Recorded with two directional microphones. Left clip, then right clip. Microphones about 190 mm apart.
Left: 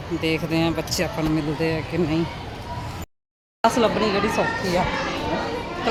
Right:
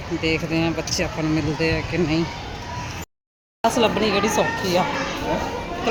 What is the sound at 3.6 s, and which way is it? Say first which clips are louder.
Speech: even; 5° left (ahead or behind).